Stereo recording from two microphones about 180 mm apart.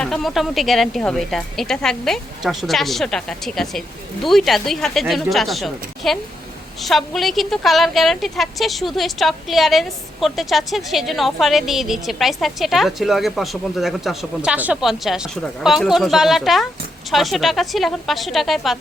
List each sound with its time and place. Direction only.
0.0 s a woman's voice: centre (ahead or behind)